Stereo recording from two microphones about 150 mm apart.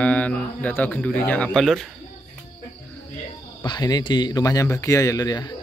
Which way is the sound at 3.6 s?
25° left (ahead or behind).